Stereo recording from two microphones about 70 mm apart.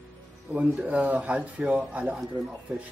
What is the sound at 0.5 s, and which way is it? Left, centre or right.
Speech, right.